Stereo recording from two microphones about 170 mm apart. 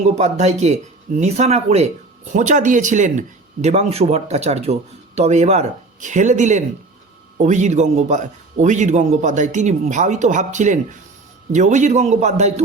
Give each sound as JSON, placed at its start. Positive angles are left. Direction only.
{"t": 0.2, "sound": "speech", "side_deg": -40}